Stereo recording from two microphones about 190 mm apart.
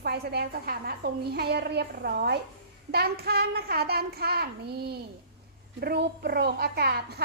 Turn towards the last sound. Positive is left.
turn(degrees=-55)  # may be behind; listen again after turning